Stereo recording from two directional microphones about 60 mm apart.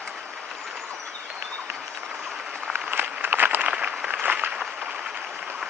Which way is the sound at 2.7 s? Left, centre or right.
Right.